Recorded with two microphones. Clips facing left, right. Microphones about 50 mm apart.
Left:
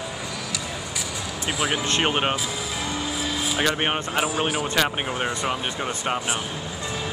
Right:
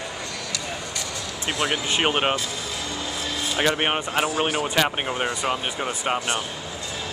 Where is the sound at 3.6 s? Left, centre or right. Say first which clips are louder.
Right 2 dB; centre.